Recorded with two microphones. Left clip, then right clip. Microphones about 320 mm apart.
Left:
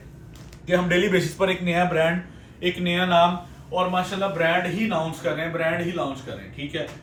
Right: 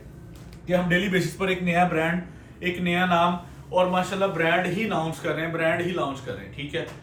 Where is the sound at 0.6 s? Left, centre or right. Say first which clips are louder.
Left 3 dB; left; by 6.4 s centre.